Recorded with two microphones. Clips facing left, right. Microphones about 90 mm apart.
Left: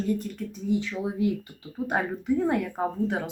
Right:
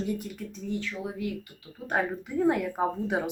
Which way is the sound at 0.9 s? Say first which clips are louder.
Left 6 dB; 25° left (ahead or behind).